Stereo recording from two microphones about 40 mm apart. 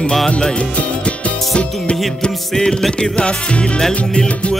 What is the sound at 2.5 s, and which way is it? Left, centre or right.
Music, centre.